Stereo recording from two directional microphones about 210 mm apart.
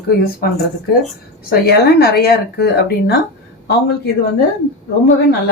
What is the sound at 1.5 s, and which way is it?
Speech, 50° left (ahead or behind).